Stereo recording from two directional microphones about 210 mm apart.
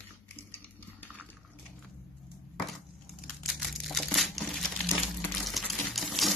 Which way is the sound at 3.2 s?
Centre (ahead or behind).